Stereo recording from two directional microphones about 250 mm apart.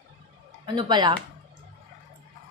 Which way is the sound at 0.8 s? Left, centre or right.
Centre.